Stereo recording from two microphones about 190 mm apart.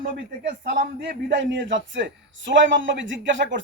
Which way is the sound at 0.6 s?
50° right (ahead or behind).